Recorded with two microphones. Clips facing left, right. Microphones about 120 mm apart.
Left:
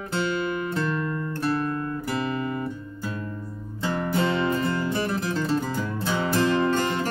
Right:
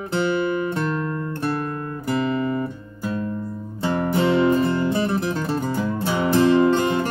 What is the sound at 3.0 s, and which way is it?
Music, 30° right (ahead or behind).